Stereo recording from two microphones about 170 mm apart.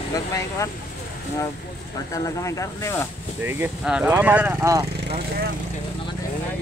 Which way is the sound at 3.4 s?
10° right (ahead or behind).